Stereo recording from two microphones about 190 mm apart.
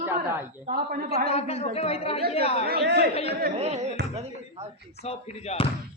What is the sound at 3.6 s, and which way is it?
Speech, 35° right (ahead or behind).